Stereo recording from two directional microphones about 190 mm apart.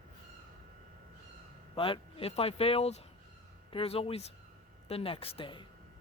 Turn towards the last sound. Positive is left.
turn(degrees=25)  # may be behind; listen again after turning